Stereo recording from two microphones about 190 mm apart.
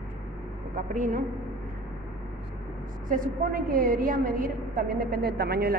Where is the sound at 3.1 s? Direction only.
45° right (ahead or behind).